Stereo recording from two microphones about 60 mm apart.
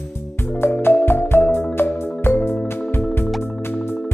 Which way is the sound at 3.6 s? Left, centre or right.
Left.